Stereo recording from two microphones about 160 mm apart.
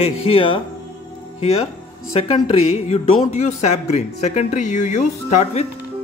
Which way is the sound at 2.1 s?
40° left (ahead or behind).